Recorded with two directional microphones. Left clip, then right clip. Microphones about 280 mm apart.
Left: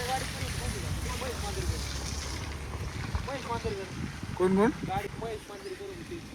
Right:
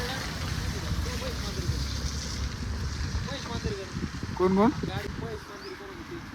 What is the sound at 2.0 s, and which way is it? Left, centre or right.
Boat, centre.